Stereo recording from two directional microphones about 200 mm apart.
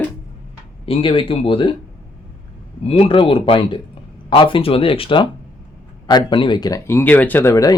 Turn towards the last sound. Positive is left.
turn(degrees=15)  # may be behind; listen again after turning